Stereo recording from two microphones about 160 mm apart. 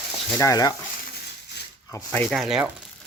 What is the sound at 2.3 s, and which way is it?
Speech, 5° right (ahead or behind).